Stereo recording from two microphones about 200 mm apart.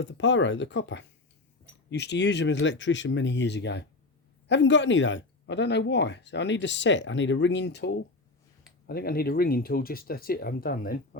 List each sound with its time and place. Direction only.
0.0 s speech: 65° left (ahead or behind); by 11.2 s 45° left (ahead or behind)